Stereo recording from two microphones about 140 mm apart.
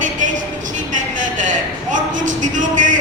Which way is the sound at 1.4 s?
65° right (ahead or behind).